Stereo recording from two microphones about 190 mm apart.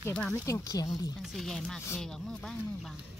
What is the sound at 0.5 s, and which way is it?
Speech, 20° left (ahead or behind).